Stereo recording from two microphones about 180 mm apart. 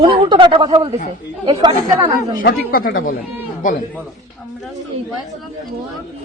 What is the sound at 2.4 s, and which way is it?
Speech, 55° left (ahead or behind).